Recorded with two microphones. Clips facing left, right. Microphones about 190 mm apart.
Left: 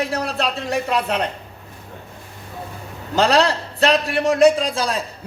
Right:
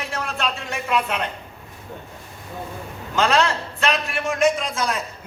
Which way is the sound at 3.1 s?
35° left (ahead or behind).